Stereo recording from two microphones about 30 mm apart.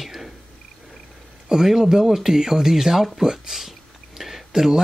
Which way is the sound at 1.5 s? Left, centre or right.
Centre.